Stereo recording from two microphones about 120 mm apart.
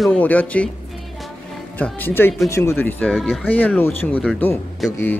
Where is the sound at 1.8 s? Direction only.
15° left (ahead or behind).